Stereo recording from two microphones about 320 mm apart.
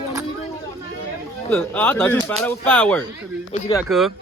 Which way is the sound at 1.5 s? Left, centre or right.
Centre.